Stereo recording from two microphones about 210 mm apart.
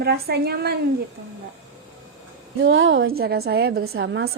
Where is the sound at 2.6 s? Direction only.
65° right (ahead or behind).